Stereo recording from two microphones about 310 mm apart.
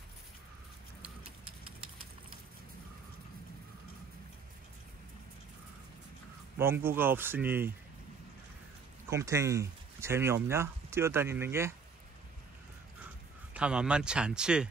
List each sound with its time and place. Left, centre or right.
1.4 s a sound: centre
6.6 s speech: centre
9.1 s speech: centre
13.5 s speech: centre